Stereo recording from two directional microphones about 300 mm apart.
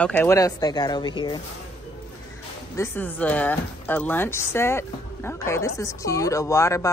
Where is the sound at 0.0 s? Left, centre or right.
Centre.